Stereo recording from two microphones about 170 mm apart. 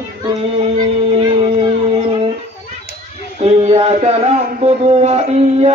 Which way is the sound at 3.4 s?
40° right (ahead or behind).